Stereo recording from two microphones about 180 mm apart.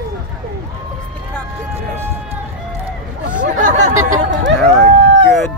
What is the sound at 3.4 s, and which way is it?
Chatter, 45° right (ahead or behind).